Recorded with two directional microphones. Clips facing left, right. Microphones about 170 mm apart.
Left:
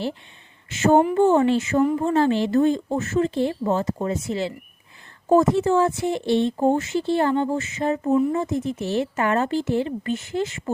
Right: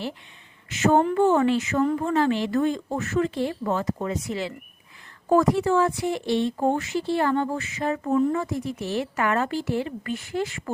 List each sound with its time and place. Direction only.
0.7 s speech: 30° left (ahead or behind)